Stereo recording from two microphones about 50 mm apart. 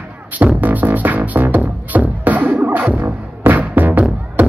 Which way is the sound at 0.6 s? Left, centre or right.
Right.